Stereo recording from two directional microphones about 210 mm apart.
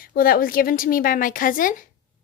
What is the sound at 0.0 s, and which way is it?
A woman's voice, 45° left (ahead or behind).